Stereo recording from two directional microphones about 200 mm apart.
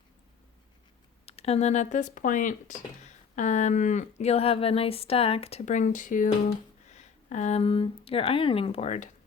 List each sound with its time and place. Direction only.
1.2 s speech: 30° left (ahead or behind)